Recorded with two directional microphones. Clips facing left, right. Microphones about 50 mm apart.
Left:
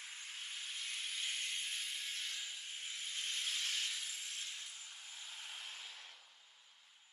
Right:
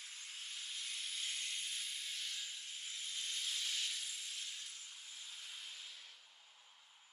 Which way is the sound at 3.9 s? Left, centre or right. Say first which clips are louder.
Left 1 dB; left.